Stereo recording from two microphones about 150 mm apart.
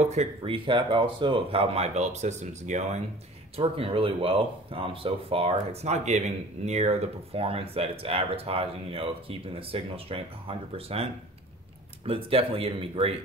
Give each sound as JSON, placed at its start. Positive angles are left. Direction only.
{"t": 0.0, "sound": "speech", "side_deg": -45}
{"t": 12.1, "sound": "speech", "side_deg": -40}